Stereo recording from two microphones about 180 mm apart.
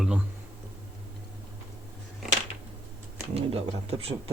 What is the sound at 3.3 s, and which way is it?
Speech, 35° right (ahead or behind).